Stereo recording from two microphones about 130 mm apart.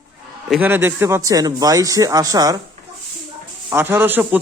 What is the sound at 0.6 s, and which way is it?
Speech, 15° right (ahead or behind).